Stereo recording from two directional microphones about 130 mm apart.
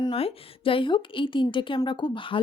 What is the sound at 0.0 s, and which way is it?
A woman's voice, 45° left (ahead or behind).